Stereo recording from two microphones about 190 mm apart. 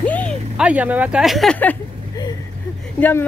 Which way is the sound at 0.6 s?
5° right (ahead or behind).